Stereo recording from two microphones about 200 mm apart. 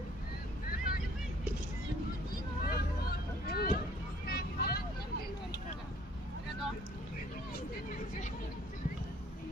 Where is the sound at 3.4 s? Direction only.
50° left (ahead or behind).